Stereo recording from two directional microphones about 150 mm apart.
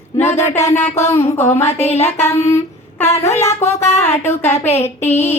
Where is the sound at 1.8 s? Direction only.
45° left (ahead or behind).